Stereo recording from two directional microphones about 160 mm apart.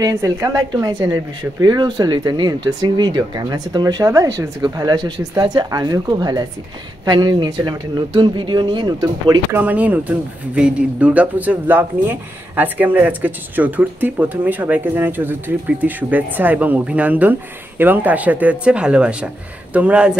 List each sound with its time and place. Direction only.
0.0 s speech: 20° right (ahead or behind)
9.6 s speech: 10° right (ahead or behind)